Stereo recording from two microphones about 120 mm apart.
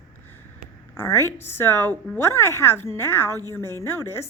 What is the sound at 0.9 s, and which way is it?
A woman's voice, 20° left (ahead or behind).